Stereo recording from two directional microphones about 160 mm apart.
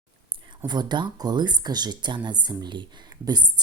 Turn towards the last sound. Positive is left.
turn(degrees=-25)  # may be behind; listen again after turning